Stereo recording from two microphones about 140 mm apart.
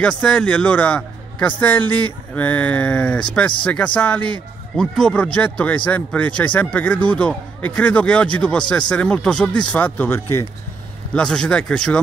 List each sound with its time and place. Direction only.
0.0 s a man's voice: 5° left (ahead or behind)
11.1 s speech: 5° left (ahead or behind)